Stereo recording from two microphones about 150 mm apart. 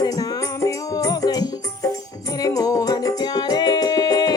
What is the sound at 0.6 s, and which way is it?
Music, 25° left (ahead or behind).